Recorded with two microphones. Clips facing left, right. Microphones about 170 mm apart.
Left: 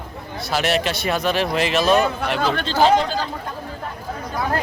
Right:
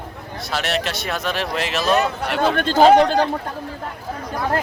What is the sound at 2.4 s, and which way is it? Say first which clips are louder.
Speech: right 5 dB; 50° right (ahead or behind).